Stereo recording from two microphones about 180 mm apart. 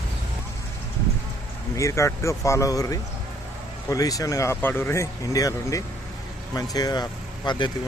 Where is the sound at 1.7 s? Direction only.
15° left (ahead or behind).